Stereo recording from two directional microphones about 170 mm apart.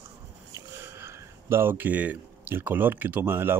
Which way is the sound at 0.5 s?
15° right (ahead or behind).